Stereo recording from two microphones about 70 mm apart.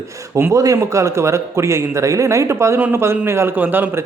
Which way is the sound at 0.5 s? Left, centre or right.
Right.